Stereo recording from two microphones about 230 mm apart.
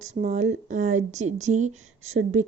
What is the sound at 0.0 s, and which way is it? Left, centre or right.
Speech, right.